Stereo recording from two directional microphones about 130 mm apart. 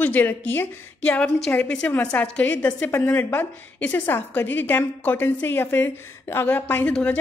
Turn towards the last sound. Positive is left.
turn(degrees=10)  # may be behind; listen again after turning